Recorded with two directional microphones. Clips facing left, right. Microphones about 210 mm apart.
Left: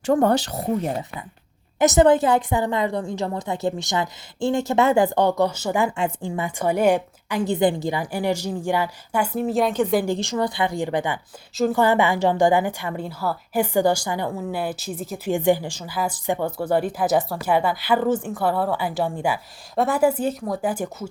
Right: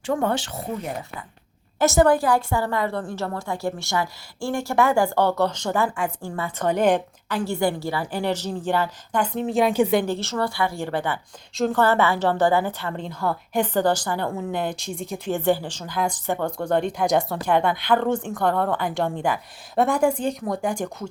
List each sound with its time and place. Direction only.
0.0 s speech: 40° left (ahead or behind)
1.8 s a woman's voice: 20° left (ahead or behind); by 9.9 s 5° right (ahead or behind)
10.1 s a woman's voice: 15° left (ahead or behind)
11.5 s a woman's voice: 5° left (ahead or behind)
11.8 s a woman's voice: 15° left (ahead or behind)
15.3 s a woman's voice: 15° left (ahead or behind)